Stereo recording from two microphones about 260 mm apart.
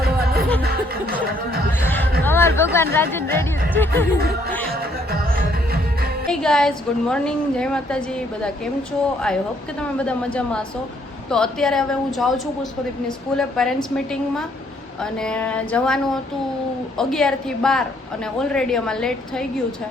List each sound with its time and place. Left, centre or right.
1.2 s speech: right
1.8 s music: centre
2.7 s speech: centre
6.4 s a woman's voice: centre
10.0 s a woman's voice: centre